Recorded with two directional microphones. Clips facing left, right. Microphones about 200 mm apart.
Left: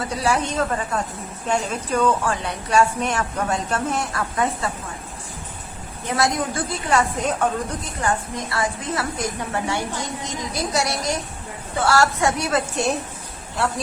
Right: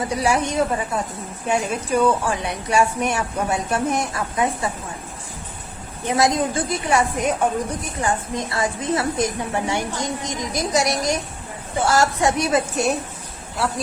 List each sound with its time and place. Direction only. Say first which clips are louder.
0.0 s a woman's voice: right 2 dB; 15° right (ahead or behind)
6.1 s a woman's voice: right 3 dB; 20° right (ahead or behind)